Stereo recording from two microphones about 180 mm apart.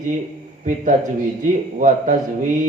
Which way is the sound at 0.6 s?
45° right (ahead or behind).